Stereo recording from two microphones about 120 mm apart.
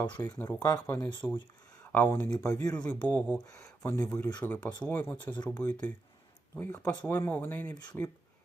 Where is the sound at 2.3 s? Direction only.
30° left (ahead or behind).